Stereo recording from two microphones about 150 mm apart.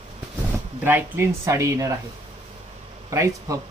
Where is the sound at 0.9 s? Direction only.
15° right (ahead or behind).